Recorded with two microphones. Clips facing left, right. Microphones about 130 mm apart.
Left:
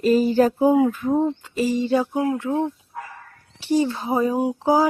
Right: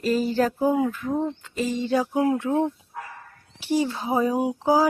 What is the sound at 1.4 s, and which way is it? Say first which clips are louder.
Speech: left 4 dB; 5° left (ahead or behind).